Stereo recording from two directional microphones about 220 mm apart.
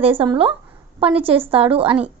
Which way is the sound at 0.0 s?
25° right (ahead or behind).